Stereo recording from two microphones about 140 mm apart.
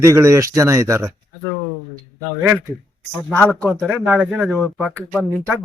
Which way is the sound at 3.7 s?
Centre (ahead or behind).